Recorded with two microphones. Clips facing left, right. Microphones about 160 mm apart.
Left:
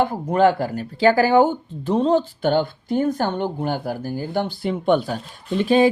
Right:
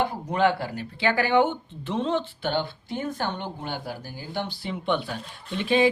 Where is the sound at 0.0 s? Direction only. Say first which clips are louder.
Left 6 dB; 45° left (ahead or behind).